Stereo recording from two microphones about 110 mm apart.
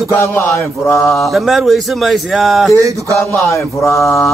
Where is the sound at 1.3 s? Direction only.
Centre (ahead or behind).